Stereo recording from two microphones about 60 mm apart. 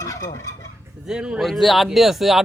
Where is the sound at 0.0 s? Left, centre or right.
Left.